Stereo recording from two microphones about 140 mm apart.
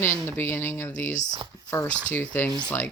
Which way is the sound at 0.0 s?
15° left (ahead or behind).